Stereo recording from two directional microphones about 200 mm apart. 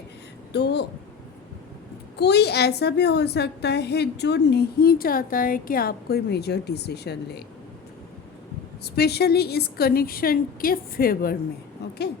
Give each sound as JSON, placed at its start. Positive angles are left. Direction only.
{"t": 0.5, "sound": "a child's voice", "side_deg": 55}
{"t": 2.1, "sound": "a child's voice", "side_deg": 55}
{"t": 8.8, "sound": "a woman's voice", "side_deg": 55}